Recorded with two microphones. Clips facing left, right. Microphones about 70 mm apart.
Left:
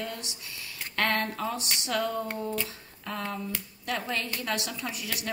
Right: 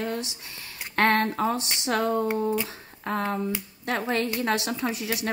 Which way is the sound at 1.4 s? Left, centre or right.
Right.